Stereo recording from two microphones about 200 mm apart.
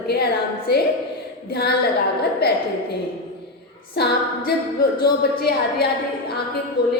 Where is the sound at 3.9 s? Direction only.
55° left (ahead or behind).